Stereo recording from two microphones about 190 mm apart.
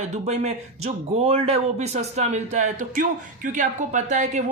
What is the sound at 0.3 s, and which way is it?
Speech, 35° right (ahead or behind).